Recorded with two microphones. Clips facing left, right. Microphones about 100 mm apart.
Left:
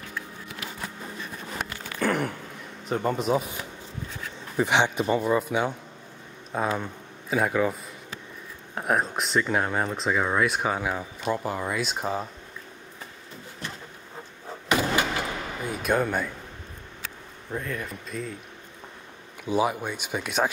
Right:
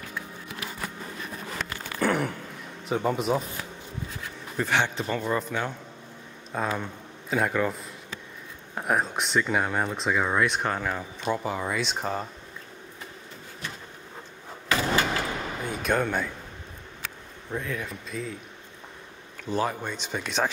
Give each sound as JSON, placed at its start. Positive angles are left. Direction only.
{"t": 2.0, "sound": "a sound", "side_deg": 0}
{"t": 2.9, "sound": "speech", "side_deg": 0}
{"t": 4.6, "sound": "speech", "side_deg": 15}
{"t": 14.7, "sound": "vehicle", "side_deg": 15}
{"t": 15.7, "sound": "speech", "side_deg": 5}
{"t": 17.5, "sound": "speech", "side_deg": 0}
{"t": 19.4, "sound": "speech", "side_deg": 10}